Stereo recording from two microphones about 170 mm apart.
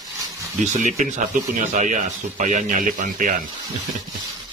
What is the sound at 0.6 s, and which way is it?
Speech, 45° right (ahead or behind).